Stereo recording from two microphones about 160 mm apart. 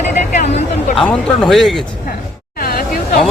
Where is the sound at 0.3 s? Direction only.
50° left (ahead or behind).